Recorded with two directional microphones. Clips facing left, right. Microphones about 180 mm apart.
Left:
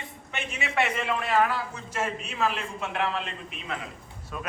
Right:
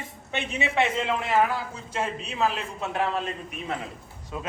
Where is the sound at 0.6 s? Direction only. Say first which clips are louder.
Right 2 dB; 20° right (ahead or behind).